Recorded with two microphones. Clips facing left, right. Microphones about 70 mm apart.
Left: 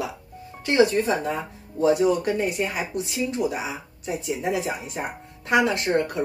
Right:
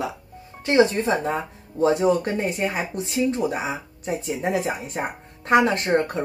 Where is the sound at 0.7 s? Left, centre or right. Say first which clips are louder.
Right 1 dB; right.